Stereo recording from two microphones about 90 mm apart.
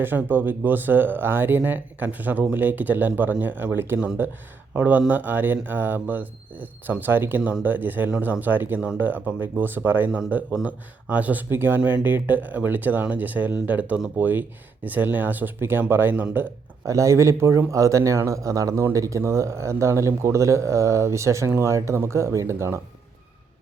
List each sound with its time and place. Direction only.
0.0 s speech: 20° right (ahead or behind)
16.8 s a man's voice: 35° right (ahead or behind)